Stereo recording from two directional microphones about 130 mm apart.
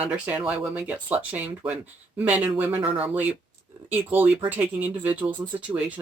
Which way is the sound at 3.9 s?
15° right (ahead or behind).